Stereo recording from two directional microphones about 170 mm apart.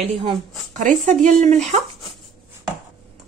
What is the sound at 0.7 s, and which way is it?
Speech, 45° right (ahead or behind).